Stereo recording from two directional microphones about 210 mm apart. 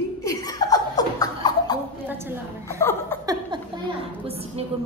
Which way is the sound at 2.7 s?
10° left (ahead or behind).